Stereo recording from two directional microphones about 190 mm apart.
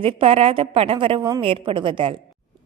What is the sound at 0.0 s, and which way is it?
A woman's voice, 30° right (ahead or behind).